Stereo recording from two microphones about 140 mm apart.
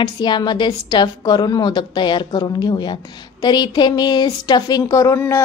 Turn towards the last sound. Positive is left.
turn(degrees=20)  # may be behind; listen again after turning